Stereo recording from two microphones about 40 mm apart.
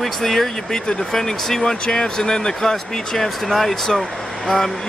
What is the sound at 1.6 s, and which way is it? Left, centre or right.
Speech, left.